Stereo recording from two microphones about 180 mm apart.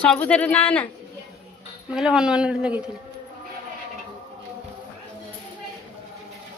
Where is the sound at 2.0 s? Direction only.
5° right (ahead or behind).